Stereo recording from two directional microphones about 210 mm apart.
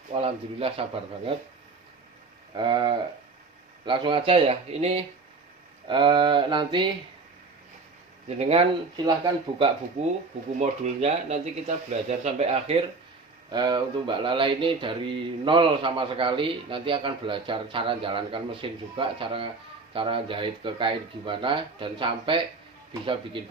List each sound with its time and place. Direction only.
0.1 s speech: 25° right (ahead or behind)
2.6 s speech: 20° right (ahead or behind)
8.4 s speech: 30° right (ahead or behind)
10.6 s speech: 30° right (ahead or behind)